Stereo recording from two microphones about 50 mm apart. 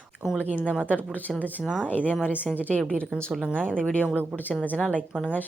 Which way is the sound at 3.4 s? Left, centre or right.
Right.